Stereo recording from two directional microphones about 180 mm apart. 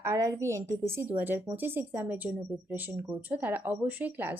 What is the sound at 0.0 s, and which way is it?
Speech, 15° right (ahead or behind).